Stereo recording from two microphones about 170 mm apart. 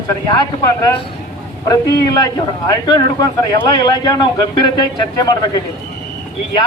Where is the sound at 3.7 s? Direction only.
25° left (ahead or behind).